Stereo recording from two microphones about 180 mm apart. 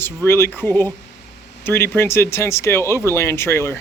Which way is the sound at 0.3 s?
15° left (ahead or behind).